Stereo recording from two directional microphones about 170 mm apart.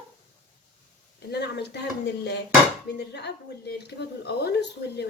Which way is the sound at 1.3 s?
80° left.